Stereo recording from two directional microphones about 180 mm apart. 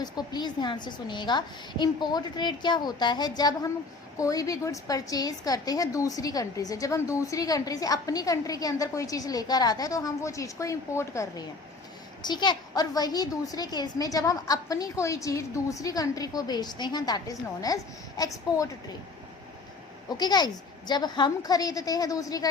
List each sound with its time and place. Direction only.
0.0 s a woman's voice: 25° left (ahead or behind)
20.1 s a woman's voice: 25° left (ahead or behind)